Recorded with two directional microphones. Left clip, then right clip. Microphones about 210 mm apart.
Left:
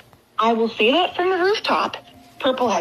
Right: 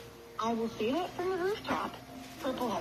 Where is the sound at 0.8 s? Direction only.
90° left; by 1.9 s 55° left (ahead or behind).